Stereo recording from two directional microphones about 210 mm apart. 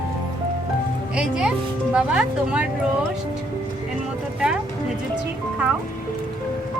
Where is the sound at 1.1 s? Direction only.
5° right (ahead or behind).